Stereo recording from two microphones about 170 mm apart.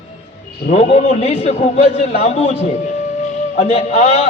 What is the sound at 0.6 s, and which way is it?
A man's voice, 40° left (ahead or behind).